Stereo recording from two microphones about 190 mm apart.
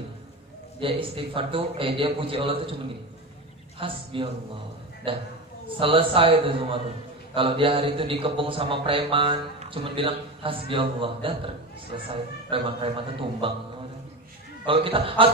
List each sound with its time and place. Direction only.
0.7 s a man's voice: 30° right (ahead or behind)
3.8 s a man's voice: 30° right (ahead or behind)
14.7 s a man's voice: 30° right (ahead or behind)